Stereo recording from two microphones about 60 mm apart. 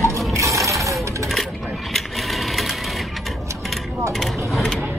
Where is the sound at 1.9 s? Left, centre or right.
Centre.